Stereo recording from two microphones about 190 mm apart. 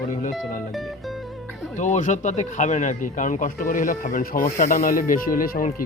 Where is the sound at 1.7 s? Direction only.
40° left (ahead or behind).